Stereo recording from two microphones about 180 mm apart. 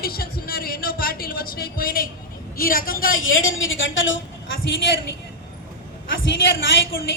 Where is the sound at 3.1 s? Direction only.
90° left.